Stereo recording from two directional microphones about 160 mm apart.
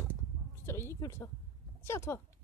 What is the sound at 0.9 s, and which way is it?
A woman's voice, 15° left (ahead or behind).